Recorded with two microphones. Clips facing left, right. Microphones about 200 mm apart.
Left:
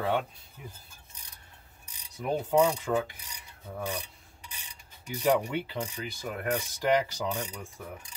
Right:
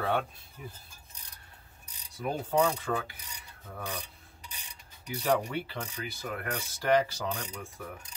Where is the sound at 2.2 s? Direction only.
15° left (ahead or behind).